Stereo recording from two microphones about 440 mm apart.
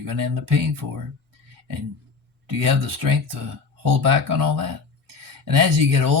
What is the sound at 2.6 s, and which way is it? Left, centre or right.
Speech, right.